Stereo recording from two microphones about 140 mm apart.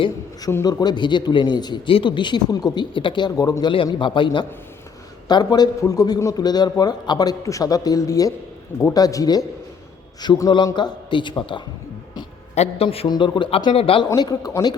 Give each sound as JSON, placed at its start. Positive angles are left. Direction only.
{"t": 0.5, "sound": "a man's voice", "side_deg": 25}
{"t": 13.1, "sound": "speech", "side_deg": 35}
{"t": 14.1, "sound": "a man's voice", "side_deg": 30}